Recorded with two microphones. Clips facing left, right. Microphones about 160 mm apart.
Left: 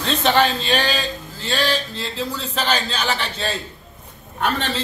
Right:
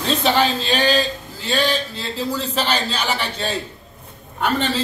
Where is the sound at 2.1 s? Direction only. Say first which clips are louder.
Right 4 dB; 10° right (ahead or behind).